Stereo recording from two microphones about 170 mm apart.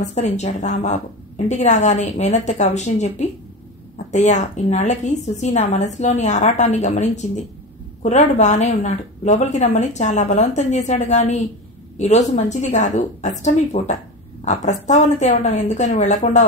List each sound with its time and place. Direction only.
0.0 s a woman's voice: 40° left (ahead or behind)